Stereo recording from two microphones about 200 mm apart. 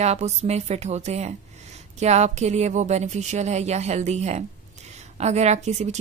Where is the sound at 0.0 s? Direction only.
35° right (ahead or behind).